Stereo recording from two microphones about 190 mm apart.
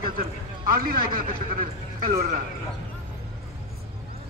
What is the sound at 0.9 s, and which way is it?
Speech, 50° right (ahead or behind).